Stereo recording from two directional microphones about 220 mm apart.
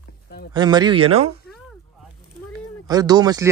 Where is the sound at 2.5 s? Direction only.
15° right (ahead or behind).